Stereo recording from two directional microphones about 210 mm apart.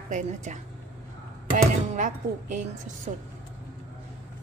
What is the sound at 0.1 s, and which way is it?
Speech, 35° right (ahead or behind).